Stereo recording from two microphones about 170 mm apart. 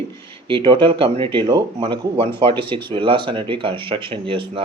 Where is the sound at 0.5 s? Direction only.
30° right (ahead or behind).